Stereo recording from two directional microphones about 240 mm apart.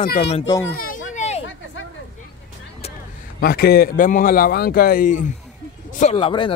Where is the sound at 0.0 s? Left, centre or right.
Left.